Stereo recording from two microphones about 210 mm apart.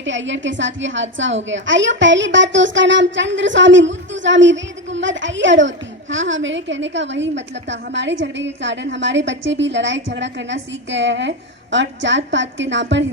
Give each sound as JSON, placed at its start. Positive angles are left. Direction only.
{"t": 0.0, "sound": "a woman's voice", "side_deg": -60}